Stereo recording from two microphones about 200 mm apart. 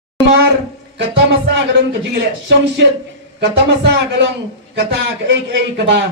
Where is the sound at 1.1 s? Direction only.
60° right (ahead or behind).